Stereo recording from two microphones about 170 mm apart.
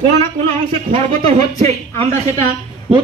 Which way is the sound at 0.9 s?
40° right (ahead or behind).